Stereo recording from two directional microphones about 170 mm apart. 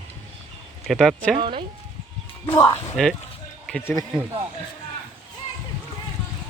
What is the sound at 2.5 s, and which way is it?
Speech, 15° left (ahead or behind).